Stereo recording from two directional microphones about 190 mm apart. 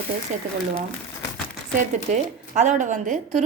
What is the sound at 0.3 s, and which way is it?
Speech, 40° right (ahead or behind).